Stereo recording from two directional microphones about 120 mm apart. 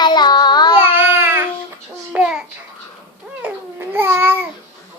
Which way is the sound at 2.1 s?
10° right (ahead or behind).